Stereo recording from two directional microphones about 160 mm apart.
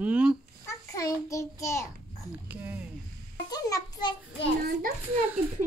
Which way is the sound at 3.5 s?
25° left (ahead or behind).